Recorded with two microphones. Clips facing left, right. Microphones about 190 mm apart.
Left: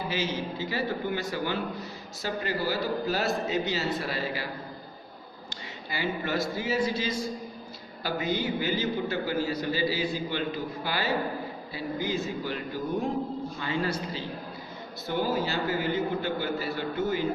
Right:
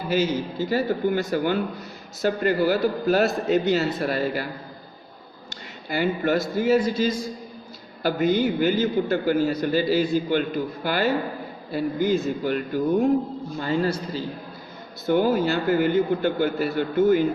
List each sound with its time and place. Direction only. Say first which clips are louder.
0.1 s a man's voice: right 12 dB; 45° right (ahead or behind)
5.9 s a man's voice: right 8 dB; 50° right (ahead or behind)
15.0 s a man's voice: right 8 dB; 50° right (ahead or behind)